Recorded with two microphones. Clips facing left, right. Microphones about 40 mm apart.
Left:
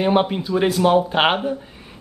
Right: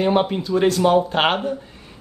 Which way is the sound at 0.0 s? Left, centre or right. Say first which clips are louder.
Even; centre.